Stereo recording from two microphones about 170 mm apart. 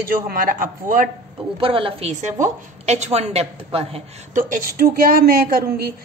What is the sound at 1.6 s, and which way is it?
A woman's voice, 30° right (ahead or behind).